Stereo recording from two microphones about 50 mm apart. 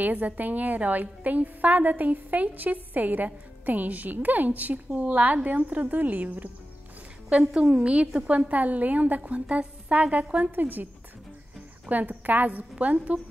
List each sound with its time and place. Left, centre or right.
0.0 s a woman's voice: right
7.2 s a woman's voice: centre
10.4 s a woman's voice: right
11.9 s a woman's voice: right